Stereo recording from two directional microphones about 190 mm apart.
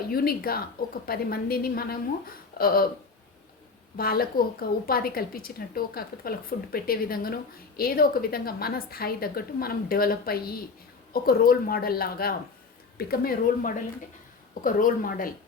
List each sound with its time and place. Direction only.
0.1 s a woman's voice: 50° left (ahead or behind)
3.9 s a woman's voice: 50° left (ahead or behind)